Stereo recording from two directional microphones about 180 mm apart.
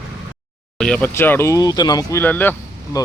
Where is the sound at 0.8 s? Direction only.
5° left (ahead or behind); by 2.0 s 20° left (ahead or behind).